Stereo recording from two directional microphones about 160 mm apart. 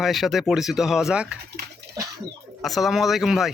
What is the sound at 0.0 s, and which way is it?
Speech, centre (ahead or behind).